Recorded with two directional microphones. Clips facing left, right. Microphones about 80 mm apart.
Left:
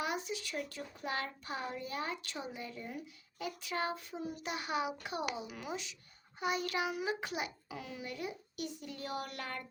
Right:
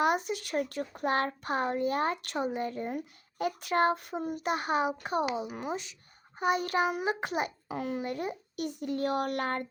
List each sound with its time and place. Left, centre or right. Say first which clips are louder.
0.0 s a child's voice: right 10 dB; right